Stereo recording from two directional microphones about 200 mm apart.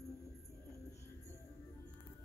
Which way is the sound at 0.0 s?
15° left (ahead or behind).